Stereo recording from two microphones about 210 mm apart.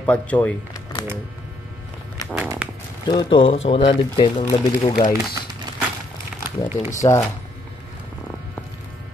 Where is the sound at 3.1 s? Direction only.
20° left (ahead or behind).